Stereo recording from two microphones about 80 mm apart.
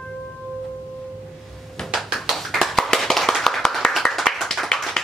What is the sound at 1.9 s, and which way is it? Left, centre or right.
Tap, centre.